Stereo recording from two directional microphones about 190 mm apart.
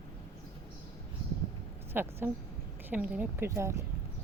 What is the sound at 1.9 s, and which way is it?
A woman's voice, 10° right (ahead or behind).